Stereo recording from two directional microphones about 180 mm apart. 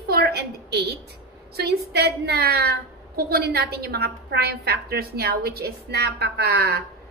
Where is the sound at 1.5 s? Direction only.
65° right (ahead or behind).